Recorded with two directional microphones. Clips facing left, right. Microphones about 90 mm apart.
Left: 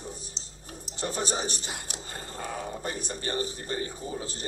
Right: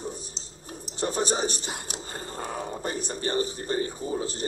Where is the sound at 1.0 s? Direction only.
25° right (ahead or behind).